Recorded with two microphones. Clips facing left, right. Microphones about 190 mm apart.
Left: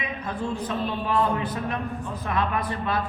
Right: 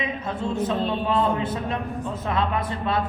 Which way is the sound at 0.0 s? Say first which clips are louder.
Right 2 dB; 25° right (ahead or behind).